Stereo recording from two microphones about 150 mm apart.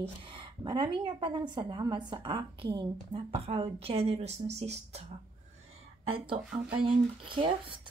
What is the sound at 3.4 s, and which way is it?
Speech, 40° right (ahead or behind).